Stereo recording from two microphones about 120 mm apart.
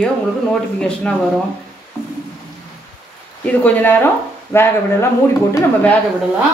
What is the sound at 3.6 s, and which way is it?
Speech, 15° left (ahead or behind).